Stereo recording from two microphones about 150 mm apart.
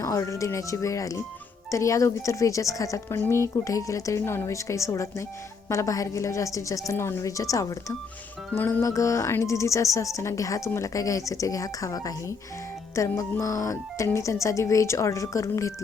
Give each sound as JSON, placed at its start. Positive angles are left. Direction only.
{"t": 0.0, "sound": "a woman's voice", "side_deg": 20}